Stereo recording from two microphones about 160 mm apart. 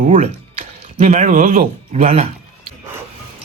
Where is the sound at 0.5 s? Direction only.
45° right (ahead or behind).